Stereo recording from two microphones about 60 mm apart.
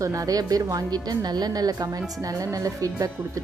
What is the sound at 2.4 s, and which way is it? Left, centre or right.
Speech, right.